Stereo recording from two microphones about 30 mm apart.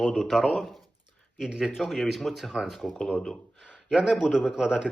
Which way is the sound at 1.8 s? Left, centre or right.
Centre.